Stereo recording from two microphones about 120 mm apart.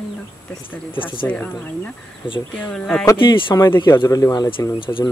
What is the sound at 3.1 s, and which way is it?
Speech, 45° left (ahead or behind).